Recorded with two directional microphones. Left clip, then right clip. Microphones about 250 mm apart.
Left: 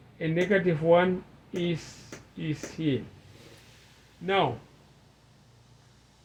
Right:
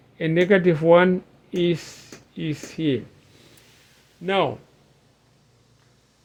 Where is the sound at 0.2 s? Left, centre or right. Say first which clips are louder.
Right 7 dB; right.